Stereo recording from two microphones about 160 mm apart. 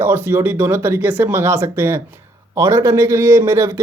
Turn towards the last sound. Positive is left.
turn(degrees=-15)  # may be behind; listen again after turning